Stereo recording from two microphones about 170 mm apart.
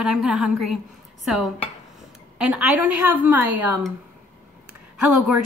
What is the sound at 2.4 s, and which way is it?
A woman's voice, 5° right (ahead or behind).